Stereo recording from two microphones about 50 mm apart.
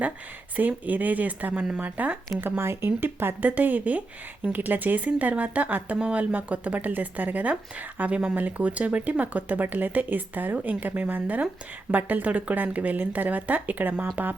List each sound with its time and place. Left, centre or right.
0.9 s speech: right
2.4 s speech: right
3.5 s speech: right